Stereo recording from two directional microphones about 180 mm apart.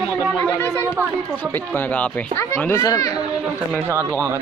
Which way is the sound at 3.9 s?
15° right (ahead or behind).